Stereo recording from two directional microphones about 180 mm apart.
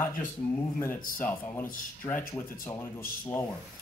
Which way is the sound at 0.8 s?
10° left (ahead or behind).